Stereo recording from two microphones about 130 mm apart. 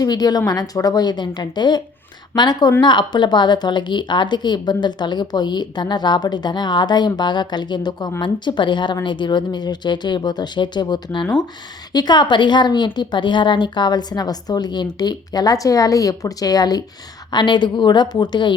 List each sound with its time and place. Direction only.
0.0 s a woman's voice: 30° left (ahead or behind)